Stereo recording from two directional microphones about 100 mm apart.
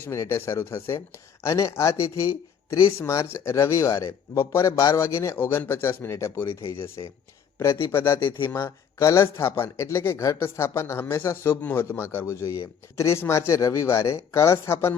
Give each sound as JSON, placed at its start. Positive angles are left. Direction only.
{"t": 0.0, "sound": "speech", "side_deg": 25}
{"t": 7.0, "sound": "speech", "side_deg": 35}
{"t": 7.9, "sound": "speech", "side_deg": 25}